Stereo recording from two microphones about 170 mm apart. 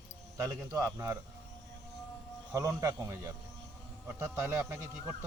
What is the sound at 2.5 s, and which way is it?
Speech, 20° right (ahead or behind).